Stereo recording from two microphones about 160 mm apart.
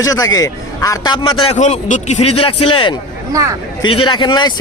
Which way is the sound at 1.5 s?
50° left (ahead or behind).